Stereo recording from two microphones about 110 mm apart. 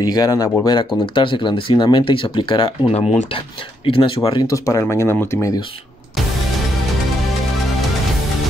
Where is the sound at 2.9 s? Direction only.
75° left (ahead or behind).